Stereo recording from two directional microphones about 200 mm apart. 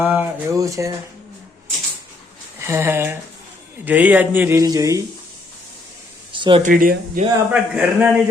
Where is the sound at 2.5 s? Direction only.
15° right (ahead or behind).